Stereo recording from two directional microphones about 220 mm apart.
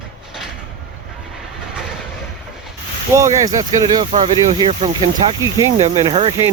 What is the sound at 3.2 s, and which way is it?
Speech, 15° right (ahead or behind).